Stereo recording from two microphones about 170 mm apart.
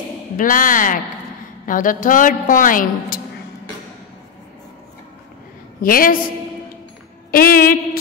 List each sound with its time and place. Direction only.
0.4 s a woman's voice: 50° left (ahead or behind)
5.8 s a woman's voice: 55° left (ahead or behind)
7.2 s a woman's voice: 60° left (ahead or behind)